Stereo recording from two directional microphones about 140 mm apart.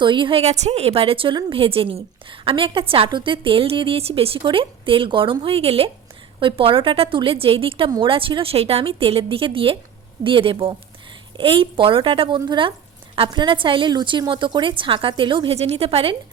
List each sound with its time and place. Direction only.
0.0 s a woman's voice: 35° right (ahead or behind)